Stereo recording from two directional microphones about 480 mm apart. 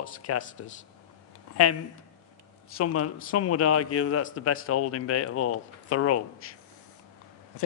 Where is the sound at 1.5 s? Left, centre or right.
Left.